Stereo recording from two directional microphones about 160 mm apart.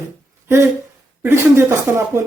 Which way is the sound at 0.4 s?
15° right (ahead or behind).